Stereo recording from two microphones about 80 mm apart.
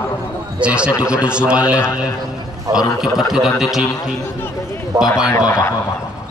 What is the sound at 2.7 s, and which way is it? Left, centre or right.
Speech, right.